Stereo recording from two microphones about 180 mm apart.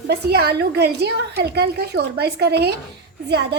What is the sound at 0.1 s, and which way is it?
A woman's voice, 65° right (ahead or behind).